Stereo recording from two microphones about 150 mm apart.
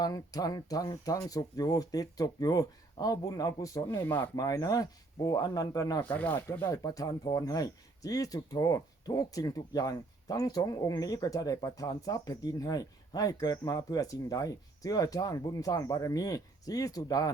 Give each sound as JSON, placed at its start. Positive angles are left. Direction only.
{"t": 0.0, "sound": "speech", "side_deg": 25}
{"t": 4.4, "sound": "speech", "side_deg": 25}
{"t": 6.0, "sound": "speech", "side_deg": 10}